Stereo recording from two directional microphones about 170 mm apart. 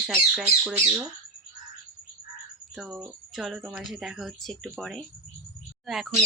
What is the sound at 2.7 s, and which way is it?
Speech, 5° right (ahead or behind).